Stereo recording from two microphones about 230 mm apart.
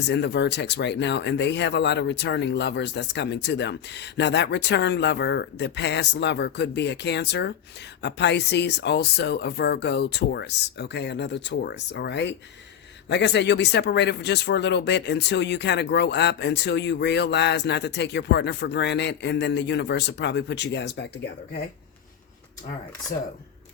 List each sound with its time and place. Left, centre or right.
0.0 s speech: left
23.1 s speech: left